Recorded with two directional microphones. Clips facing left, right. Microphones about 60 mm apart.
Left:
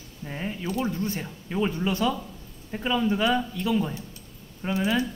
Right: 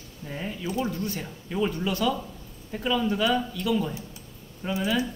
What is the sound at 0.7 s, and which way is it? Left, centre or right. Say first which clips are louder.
A man's voice: left 1 dB; left.